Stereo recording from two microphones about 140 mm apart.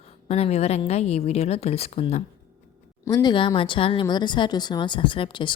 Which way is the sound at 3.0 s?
25° left (ahead or behind).